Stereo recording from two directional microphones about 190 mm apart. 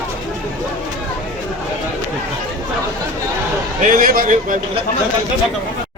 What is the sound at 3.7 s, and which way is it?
A man's voice, 45° right (ahead or behind).